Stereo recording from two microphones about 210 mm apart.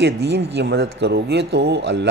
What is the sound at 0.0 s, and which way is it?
A man's voice, 55° right (ahead or behind).